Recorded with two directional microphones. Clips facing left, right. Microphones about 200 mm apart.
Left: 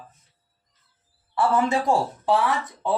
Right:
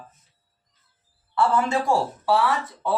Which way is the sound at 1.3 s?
20° left (ahead or behind).